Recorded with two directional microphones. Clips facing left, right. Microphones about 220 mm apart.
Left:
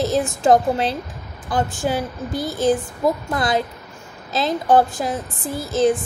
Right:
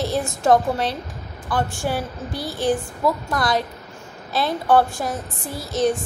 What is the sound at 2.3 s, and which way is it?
Speech, 45° left (ahead or behind).